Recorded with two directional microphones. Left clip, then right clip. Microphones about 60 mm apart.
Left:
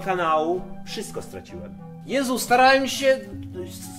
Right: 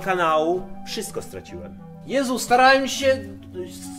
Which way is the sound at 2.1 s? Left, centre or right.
Left.